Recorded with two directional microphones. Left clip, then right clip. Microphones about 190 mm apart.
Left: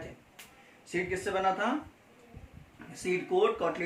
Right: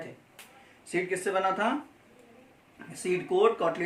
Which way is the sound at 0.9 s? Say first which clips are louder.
Right 3 dB; 60° right (ahead or behind).